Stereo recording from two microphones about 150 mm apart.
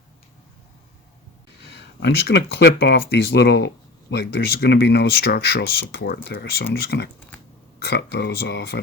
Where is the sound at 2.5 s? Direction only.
90° left.